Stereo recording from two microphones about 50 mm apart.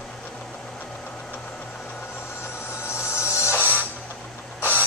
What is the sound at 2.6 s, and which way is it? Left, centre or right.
Music, left.